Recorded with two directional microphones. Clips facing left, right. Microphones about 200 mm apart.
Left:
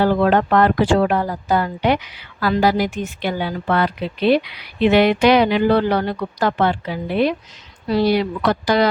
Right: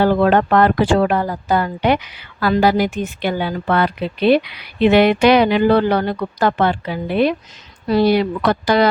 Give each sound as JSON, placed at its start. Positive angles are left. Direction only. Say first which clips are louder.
{"t": 0.0, "sound": "a woman's voice", "louder": "right 2 dB", "side_deg": -55}